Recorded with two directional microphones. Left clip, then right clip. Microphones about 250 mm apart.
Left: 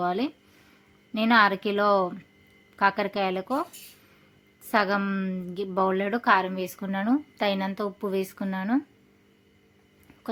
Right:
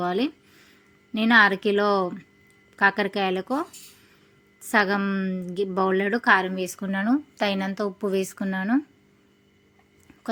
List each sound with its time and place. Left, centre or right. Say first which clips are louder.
0.0 s a woman's voice: right 2 dB; centre
4.7 s a woman's voice: right 2 dB; centre